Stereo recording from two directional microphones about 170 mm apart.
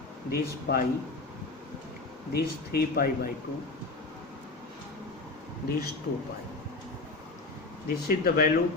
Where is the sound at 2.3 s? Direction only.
65° left (ahead or behind).